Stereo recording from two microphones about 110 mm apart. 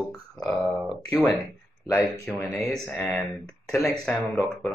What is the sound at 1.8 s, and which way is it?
Speech, 30° left (ahead or behind).